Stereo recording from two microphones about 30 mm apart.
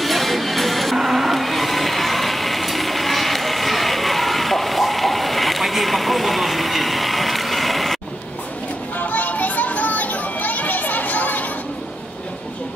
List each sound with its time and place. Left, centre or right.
0.0 s music: centre
8.9 s children playing: left